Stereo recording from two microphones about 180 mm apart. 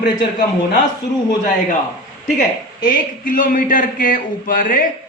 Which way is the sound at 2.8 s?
50° left (ahead or behind).